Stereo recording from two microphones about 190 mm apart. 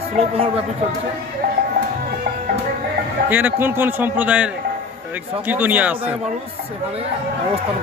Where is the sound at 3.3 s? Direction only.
10° right (ahead or behind).